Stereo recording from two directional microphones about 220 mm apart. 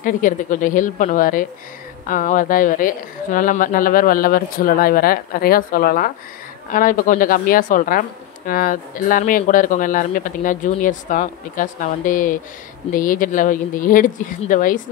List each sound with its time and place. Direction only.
0.0 s a woman's voice: 35° left (ahead or behind)